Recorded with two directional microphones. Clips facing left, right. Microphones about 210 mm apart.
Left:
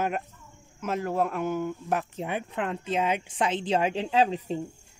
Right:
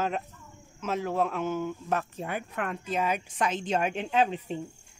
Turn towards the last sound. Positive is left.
turn(degrees=35)  # may be behind; listen again after turning